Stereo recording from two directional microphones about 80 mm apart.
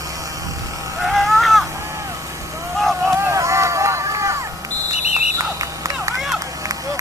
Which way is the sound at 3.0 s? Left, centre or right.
Right.